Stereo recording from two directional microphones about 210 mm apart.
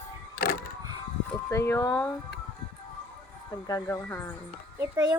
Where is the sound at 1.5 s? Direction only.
10° left (ahead or behind).